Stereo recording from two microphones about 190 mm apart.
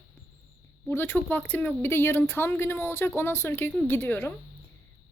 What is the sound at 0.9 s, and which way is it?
Speech, 10° left (ahead or behind).